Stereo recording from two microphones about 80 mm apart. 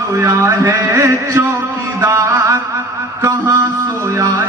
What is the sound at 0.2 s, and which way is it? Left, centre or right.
A man's voice, right.